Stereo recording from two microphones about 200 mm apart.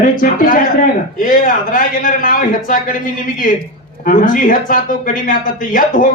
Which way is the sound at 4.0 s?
45° left (ahead or behind).